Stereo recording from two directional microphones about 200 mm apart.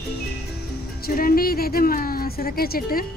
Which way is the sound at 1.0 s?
45° left (ahead or behind).